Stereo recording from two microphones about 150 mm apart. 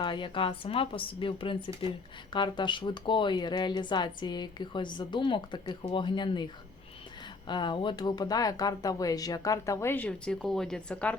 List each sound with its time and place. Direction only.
0.0 s speech: 30° left (ahead or behind)
7.4 s speech: 30° left (ahead or behind); by 11.2 s 5° left (ahead or behind)